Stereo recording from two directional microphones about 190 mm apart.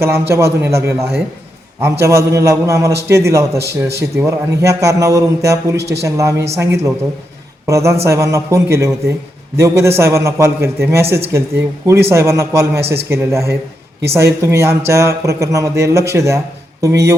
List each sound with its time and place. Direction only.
0.0 s a man's voice: 15° right (ahead or behind)